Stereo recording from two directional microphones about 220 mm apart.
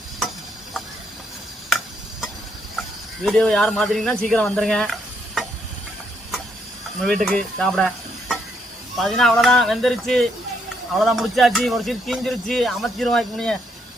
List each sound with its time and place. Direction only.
3.2 s speech: centre (ahead or behind)
7.0 s speech: 5° left (ahead or behind)